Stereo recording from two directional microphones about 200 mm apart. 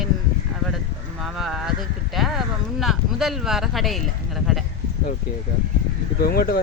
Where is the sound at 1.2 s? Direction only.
Centre (ahead or behind).